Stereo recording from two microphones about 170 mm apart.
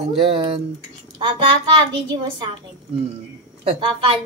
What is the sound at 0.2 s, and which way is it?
Speech, 30° right (ahead or behind).